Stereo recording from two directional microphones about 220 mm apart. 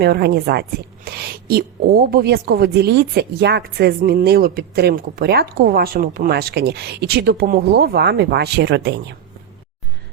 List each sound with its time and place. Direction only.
0.0 s a woman's voice: 45° right (ahead or behind)